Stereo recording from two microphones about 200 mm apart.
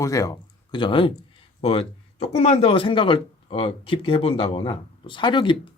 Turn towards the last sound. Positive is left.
turn(degrees=25)  # may be behind; listen again after turning